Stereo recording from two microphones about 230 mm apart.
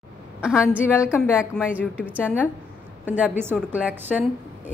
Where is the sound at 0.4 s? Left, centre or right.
Centre.